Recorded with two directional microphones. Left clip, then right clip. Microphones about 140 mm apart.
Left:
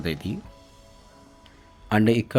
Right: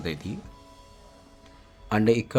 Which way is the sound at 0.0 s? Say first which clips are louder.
Left 3 dB; 15° left (ahead or behind).